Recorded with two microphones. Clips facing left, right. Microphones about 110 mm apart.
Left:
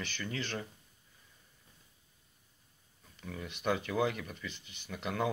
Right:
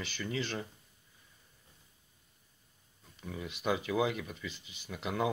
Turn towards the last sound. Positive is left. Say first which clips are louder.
# right 1 dB
turn(degrees=-5)  # may be behind; listen again after turning